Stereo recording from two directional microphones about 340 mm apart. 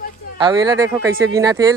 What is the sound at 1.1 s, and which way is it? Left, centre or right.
Speech, right.